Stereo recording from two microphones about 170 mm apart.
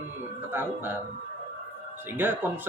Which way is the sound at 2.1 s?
10° right (ahead or behind).